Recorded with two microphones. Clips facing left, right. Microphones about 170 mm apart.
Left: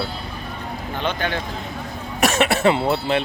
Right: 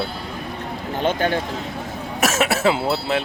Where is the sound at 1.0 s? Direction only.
45° right (ahead or behind).